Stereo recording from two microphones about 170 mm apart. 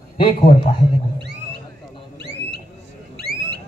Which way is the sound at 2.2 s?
90° right.